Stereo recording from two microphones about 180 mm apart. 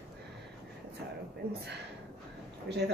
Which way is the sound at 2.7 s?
75° right (ahead or behind).